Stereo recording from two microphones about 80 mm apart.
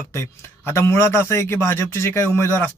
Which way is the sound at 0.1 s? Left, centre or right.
Left.